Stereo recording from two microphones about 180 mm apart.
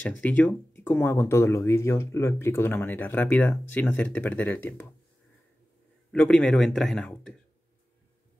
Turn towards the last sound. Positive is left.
turn(degrees=0)  # may be behind; listen again after turning